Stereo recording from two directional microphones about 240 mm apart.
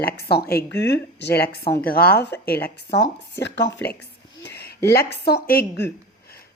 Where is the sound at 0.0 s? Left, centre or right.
Left.